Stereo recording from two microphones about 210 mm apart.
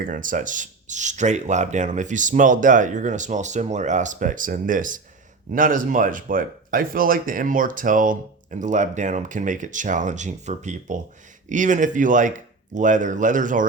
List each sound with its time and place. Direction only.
0.0 s speech: 40° right (ahead or behind)